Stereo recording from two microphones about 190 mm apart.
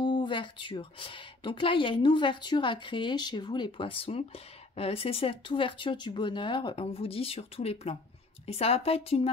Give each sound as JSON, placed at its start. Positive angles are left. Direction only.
{"t": 0.0, "sound": "a woman's voice", "side_deg": 25}